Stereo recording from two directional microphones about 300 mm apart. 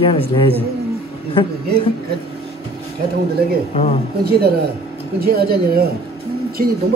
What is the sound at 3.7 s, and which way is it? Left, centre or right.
Speech, centre.